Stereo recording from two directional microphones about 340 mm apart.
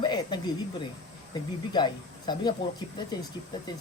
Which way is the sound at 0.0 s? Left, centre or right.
Centre.